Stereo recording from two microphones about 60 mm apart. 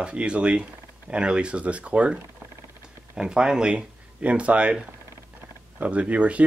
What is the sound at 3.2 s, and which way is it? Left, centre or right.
Speech, centre.